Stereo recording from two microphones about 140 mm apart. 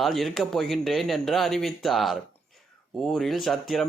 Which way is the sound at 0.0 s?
Centre (ahead or behind).